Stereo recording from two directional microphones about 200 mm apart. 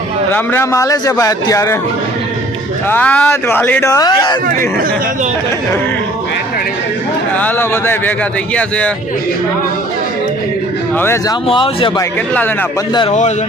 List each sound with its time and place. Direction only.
0.3 s a man's voice: 10° left (ahead or behind)
2.9 s a man's voice: 10° left (ahead or behind)
7.3 s a man's voice: 10° left (ahead or behind)
10.9 s a man's voice: 10° left (ahead or behind)
11.4 s speech: 25° left (ahead or behind)